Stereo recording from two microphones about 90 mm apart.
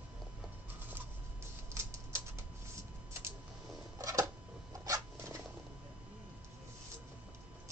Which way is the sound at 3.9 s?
35° right (ahead or behind).